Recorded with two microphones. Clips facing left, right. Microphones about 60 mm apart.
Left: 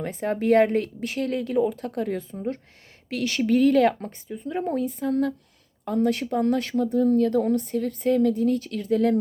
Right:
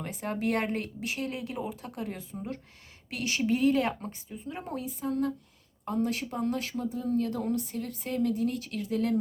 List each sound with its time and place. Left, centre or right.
0.0 s speech: left